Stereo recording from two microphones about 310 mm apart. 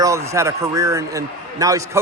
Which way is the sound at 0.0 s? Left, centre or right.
Centre.